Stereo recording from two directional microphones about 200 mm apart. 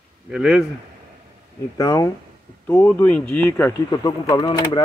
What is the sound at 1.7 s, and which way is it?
Speech, 15° left (ahead or behind).